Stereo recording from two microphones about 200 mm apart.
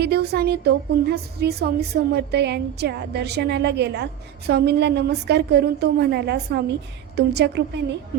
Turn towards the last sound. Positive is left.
turn(degrees=-60)  # may be behind; listen again after turning